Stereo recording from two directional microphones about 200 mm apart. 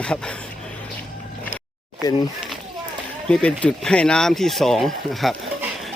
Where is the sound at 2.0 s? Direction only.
20° left (ahead or behind).